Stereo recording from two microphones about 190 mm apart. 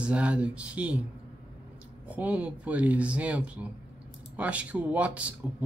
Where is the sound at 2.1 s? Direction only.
10° right (ahead or behind).